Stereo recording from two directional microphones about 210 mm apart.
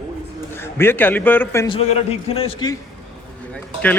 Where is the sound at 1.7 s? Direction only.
30° left (ahead or behind).